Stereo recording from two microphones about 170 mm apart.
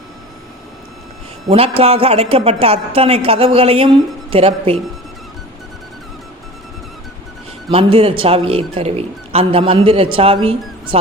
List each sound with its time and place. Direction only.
1.5 s a man's voice: 35° right (ahead or behind)
7.7 s a man's voice: 35° right (ahead or behind)